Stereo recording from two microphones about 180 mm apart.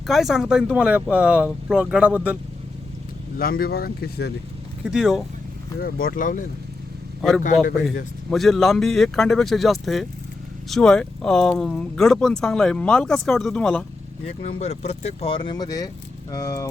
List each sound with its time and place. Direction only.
0.1 s speech: centre (ahead or behind)
3.3 s speech: 55° left (ahead or behind)
4.8 s speech: 5° right (ahead or behind)
5.8 s speech: 55° left (ahead or behind)
7.2 s a man's voice: centre (ahead or behind)
14.6 s speech: 35° left (ahead or behind); by 16.6 s 20° left (ahead or behind)